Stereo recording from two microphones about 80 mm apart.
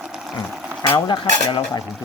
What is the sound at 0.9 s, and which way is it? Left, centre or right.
Stir, left.